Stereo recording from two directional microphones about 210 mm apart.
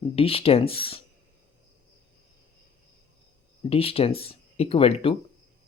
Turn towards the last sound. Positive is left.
turn(degrees=25)  # may be behind; listen again after turning